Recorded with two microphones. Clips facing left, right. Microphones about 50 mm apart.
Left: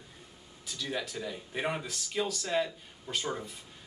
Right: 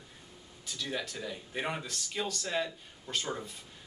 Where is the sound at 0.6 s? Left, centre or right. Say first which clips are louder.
Left 1 dB; centre.